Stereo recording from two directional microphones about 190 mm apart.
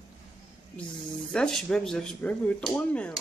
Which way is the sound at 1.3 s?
5° left (ahead or behind).